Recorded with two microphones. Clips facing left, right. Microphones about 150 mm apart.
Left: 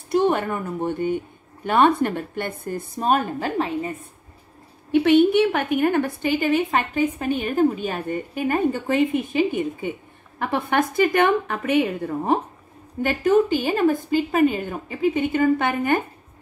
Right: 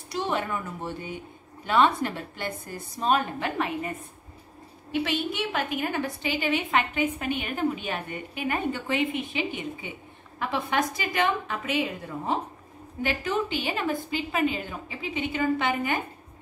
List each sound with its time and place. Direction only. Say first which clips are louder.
0.1 s a woman's voice: left 8 dB; 55° left (ahead or behind); by 3.9 s 30° left (ahead or behind)
4.9 s a woman's voice: left 13 dB; 60° left (ahead or behind)
13.0 s a woman's voice: left 9 dB; 45° left (ahead or behind)